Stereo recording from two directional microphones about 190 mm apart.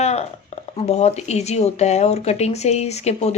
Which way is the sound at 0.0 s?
35° left (ahead or behind).